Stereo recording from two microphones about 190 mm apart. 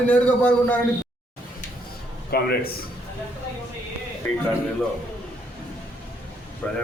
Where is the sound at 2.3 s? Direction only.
55° left (ahead or behind).